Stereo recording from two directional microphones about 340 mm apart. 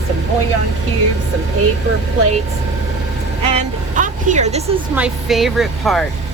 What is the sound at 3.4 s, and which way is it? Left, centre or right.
Vehicle, centre.